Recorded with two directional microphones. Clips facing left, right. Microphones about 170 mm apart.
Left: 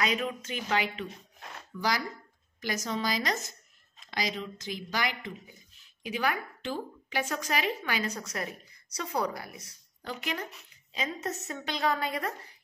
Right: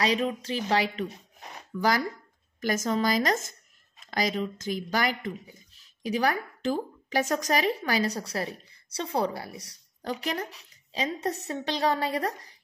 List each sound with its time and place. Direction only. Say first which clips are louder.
0.0 s speech: right 4 dB; 30° right (ahead or behind)
1.8 s a woman's voice: right 5 dB; 50° right (ahead or behind)